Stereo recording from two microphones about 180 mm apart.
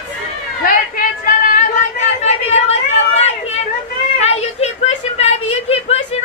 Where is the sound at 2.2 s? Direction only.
40° left (ahead or behind).